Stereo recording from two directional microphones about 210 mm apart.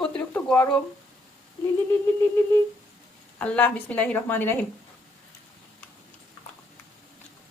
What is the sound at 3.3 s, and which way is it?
A woman's voice, 5° left (ahead or behind).